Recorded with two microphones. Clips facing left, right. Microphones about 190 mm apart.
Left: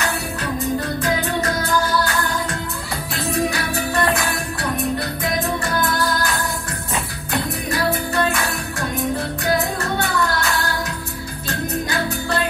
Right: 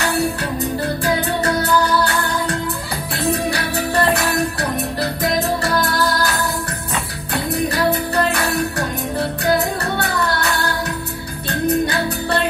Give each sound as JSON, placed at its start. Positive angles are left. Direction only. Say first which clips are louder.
{"t": 1.0, "sound": "music", "louder": "right 4 dB", "side_deg": -35}
{"t": 3.7, "sound": "music", "louder": "right 5 dB", "side_deg": -35}
{"t": 11.4, "sound": "music", "louder": "right 7 dB", "side_deg": -65}